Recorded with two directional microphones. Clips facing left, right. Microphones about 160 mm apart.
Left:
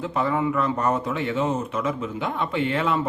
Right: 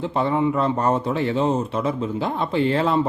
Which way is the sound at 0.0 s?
30° right (ahead or behind).